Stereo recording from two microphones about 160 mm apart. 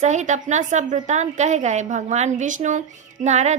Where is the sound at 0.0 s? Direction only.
50° right (ahead or behind).